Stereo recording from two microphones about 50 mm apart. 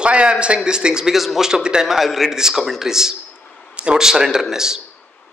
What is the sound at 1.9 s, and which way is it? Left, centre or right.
A man's voice, centre.